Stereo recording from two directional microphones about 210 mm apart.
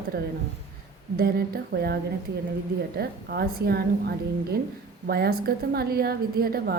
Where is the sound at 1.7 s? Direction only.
50° right (ahead or behind).